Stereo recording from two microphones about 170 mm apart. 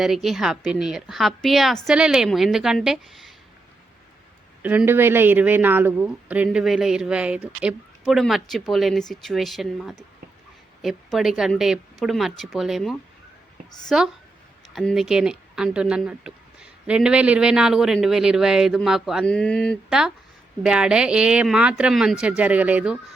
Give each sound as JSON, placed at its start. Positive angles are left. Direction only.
{"t": 0.0, "sound": "speech", "side_deg": 0}
{"t": 4.6, "sound": "speech", "side_deg": -10}